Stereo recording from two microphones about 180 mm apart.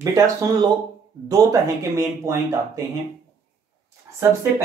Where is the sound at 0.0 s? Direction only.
20° right (ahead or behind).